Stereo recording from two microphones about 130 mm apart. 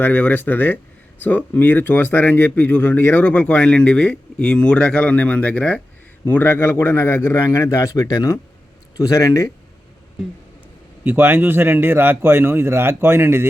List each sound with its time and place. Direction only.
0.0 s a man's voice: 15° left (ahead or behind)
11.0 s speech: 15° right (ahead or behind)